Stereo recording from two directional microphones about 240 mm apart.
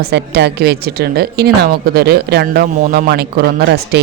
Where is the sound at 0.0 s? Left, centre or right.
Right.